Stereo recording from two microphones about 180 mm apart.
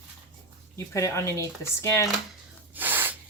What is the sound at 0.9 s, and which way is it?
Speech, 15° left (ahead or behind).